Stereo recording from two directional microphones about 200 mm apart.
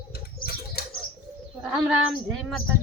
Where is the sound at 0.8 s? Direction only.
50° left (ahead or behind).